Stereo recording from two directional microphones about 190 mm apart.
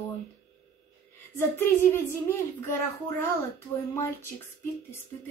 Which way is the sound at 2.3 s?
15° left (ahead or behind).